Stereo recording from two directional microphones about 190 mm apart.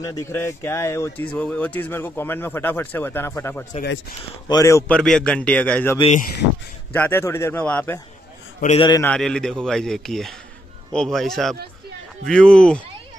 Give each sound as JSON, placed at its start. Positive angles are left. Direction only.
{"t": 0.0, "sound": "speech", "side_deg": 15}
{"t": 5.9, "sound": "speech", "side_deg": 35}
{"t": 6.9, "sound": "speech", "side_deg": 10}
{"t": 8.7, "sound": "a man's voice", "side_deg": 25}
{"t": 9.0, "sound": "speech", "side_deg": 5}